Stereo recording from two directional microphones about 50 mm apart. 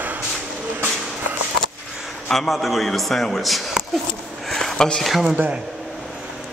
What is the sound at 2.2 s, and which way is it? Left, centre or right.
A man's voice, centre.